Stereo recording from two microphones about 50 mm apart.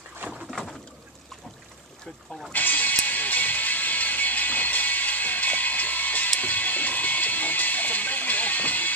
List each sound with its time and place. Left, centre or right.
0.5 s boat: centre
2.5 s music: left